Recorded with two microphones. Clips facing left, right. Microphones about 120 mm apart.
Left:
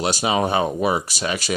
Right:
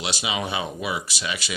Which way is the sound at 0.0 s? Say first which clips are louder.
Left 8 dB; 45° left (ahead or behind).